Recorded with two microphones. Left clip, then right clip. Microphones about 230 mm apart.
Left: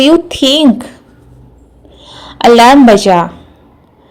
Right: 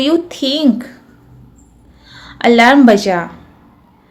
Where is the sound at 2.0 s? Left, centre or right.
Left.